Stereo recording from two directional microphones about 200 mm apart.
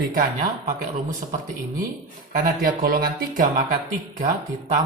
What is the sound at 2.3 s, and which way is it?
Speech, 45° right (ahead or behind).